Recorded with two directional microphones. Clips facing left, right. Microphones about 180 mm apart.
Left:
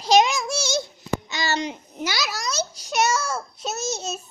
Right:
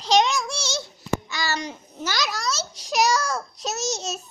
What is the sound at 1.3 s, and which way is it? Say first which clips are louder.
Babbling: left 3 dB; 20° left (ahead or behind).